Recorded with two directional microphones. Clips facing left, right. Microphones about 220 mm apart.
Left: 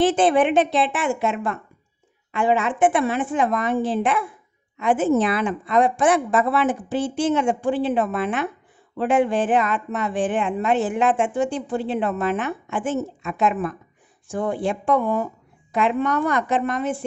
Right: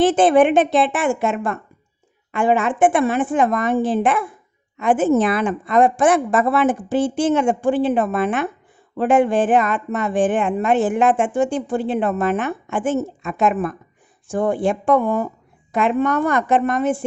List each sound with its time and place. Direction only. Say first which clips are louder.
0.0 s a woman's voice: right 4 dB; 50° right (ahead or behind)